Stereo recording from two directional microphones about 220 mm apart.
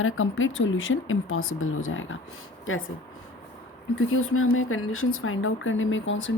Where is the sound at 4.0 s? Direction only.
65° left (ahead or behind).